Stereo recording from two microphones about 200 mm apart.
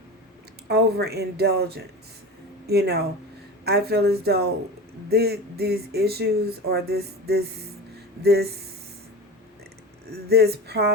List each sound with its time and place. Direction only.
0.7 s speech: 55° right (ahead or behind)
10.1 s speech: 55° right (ahead or behind)